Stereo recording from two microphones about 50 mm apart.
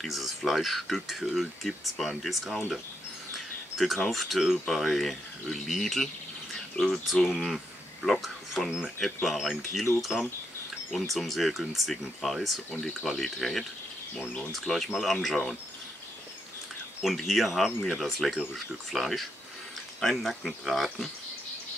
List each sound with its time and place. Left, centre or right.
0.0 s speech: centre
6.8 s speech: centre
7.2 s speech: centre
7.5 s a sound: centre
8.8 s speech: centre
14.1 s speech: left
14.5 s speech: centre
17.2 s speech: centre